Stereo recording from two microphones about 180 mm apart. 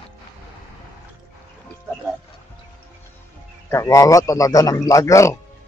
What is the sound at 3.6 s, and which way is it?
A man's voice, 15° left (ahead or behind).